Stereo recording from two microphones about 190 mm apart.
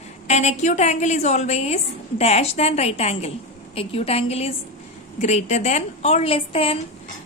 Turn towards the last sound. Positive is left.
turn(degrees=30)  # may be behind; listen again after turning